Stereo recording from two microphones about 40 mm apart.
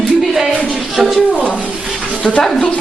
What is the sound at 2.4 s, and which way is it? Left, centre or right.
Speech, centre.